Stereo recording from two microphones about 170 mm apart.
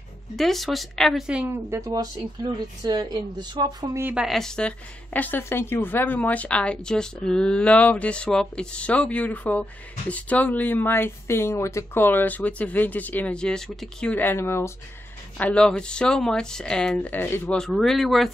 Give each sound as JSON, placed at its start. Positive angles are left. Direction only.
{"t": 0.4, "sound": "a woman's voice", "side_deg": 0}
{"t": 4.1, "sound": "a woman's voice", "side_deg": 0}